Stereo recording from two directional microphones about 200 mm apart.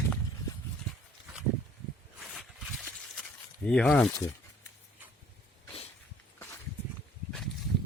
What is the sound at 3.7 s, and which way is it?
Speech, 5° left (ahead or behind).